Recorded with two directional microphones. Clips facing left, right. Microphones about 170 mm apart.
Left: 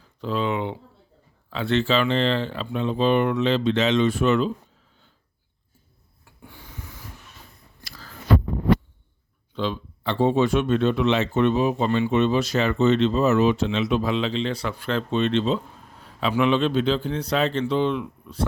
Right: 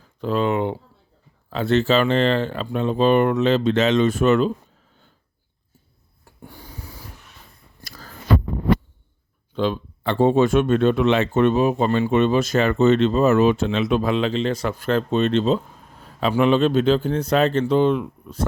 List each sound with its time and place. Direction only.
0.2 s speech: 50° right (ahead or behind)
6.2 s a sound: 40° right (ahead or behind)
9.5 s speech: 50° right (ahead or behind)